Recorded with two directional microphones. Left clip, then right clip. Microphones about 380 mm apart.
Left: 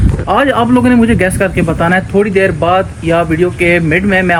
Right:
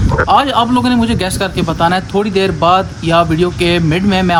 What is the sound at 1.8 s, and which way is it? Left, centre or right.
Speech, centre.